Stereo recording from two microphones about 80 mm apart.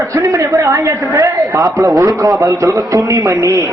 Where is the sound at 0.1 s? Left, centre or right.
Right.